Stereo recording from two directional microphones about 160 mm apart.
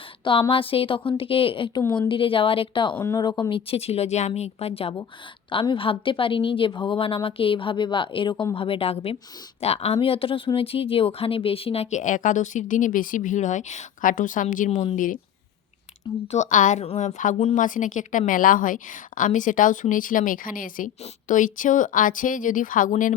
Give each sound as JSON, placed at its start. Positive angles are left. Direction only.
{"t": 0.3, "sound": "a woman's voice", "side_deg": 35}
{"t": 2.9, "sound": "a woman's voice", "side_deg": 20}
{"t": 16.3, "sound": "a woman's voice", "side_deg": 50}